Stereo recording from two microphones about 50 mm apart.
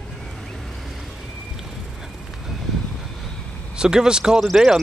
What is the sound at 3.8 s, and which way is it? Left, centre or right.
Speech, centre.